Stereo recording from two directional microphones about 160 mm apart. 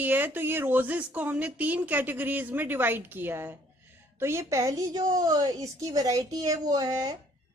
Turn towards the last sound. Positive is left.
turn(degrees=-20)  # may be behind; listen again after turning